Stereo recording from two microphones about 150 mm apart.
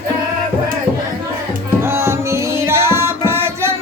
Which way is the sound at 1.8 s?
15° right (ahead or behind).